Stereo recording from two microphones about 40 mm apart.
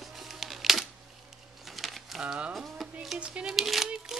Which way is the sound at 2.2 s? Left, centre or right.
Right.